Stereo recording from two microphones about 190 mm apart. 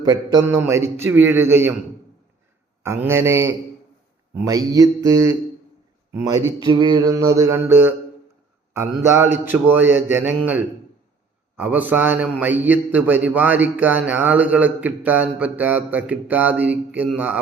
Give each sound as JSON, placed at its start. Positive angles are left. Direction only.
{"t": 0.0, "sound": "a man's voice", "side_deg": -20}
{"t": 2.8, "sound": "a man's voice", "side_deg": -15}